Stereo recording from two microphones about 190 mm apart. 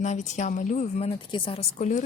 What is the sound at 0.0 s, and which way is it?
Speech, 40° left (ahead or behind).